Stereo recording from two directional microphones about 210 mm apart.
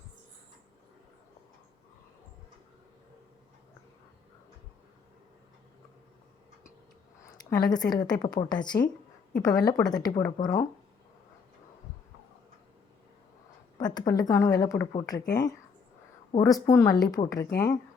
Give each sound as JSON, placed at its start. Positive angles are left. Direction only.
{"t": 7.5, "sound": "a woman's voice", "side_deg": 20}
{"t": 13.7, "sound": "speech", "side_deg": 20}